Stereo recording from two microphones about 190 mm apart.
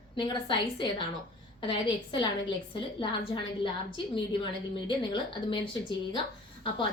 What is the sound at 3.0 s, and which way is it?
A woman's voice, 25° left (ahead or behind).